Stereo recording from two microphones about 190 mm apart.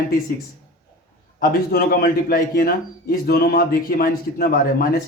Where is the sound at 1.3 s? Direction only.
50° left (ahead or behind).